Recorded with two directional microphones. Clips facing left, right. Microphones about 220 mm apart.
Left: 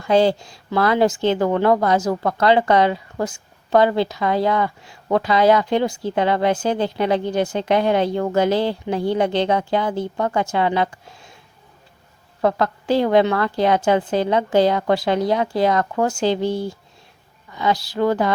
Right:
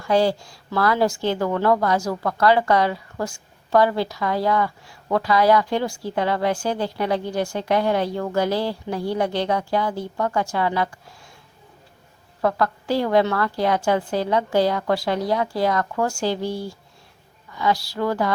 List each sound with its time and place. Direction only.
0.0 s speech: 20° left (ahead or behind)
12.4 s speech: 20° left (ahead or behind)